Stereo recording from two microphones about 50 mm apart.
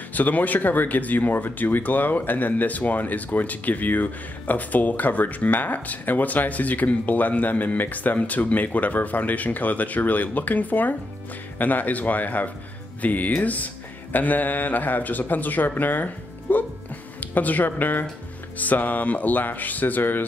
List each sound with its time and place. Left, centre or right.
0.1 s speech: left